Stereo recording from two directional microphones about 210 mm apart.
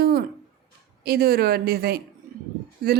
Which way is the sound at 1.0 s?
45° right (ahead or behind).